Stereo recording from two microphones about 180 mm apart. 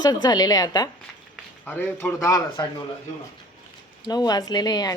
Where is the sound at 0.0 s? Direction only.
20° left (ahead or behind).